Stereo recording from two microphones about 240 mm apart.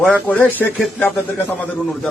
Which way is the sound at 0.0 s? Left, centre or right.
Centre.